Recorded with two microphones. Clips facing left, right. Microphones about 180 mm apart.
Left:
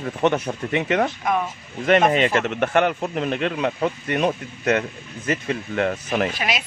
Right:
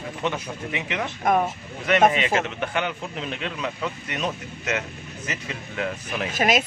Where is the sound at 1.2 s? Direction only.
45° right (ahead or behind).